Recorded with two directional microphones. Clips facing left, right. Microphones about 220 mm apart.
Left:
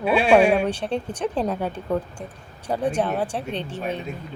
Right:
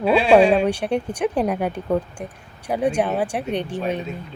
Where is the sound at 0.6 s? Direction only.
15° right (ahead or behind).